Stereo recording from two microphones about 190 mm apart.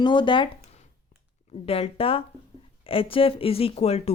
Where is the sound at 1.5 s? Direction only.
30° left (ahead or behind).